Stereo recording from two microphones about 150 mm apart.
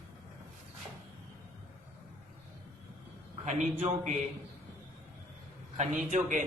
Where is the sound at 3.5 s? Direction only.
50° right (ahead or behind).